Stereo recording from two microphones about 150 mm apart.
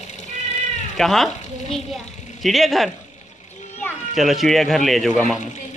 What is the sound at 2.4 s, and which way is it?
Speech, centre (ahead or behind).